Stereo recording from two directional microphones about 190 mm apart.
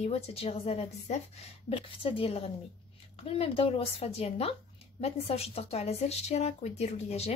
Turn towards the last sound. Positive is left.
turn(degrees=35)  # may be behind; listen again after turning